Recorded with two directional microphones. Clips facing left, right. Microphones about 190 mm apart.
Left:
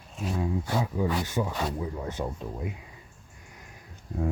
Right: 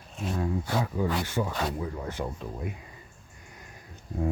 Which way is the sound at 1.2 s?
20° left (ahead or behind).